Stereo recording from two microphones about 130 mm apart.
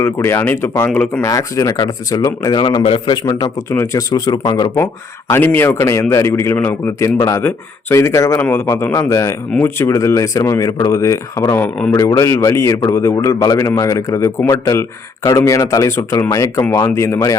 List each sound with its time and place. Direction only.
0.0 s speech: 20° left (ahead or behind)
2.8 s a man's voice: 45° left (ahead or behind)
3.2 s speech: 25° left (ahead or behind)